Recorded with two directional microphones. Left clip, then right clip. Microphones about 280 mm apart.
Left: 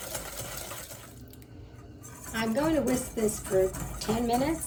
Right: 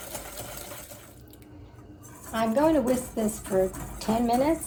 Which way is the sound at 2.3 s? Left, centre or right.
Centre.